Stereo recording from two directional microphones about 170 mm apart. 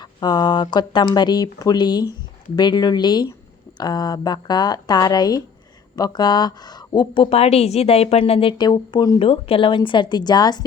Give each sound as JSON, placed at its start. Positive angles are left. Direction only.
{"t": 0.0, "sound": "a woman's voice", "side_deg": 25}